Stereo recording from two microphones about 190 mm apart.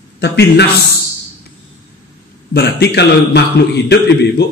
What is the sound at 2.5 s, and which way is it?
A man's voice, 60° left (ahead or behind).